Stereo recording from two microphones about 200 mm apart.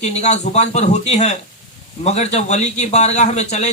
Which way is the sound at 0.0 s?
35° left (ahead or behind).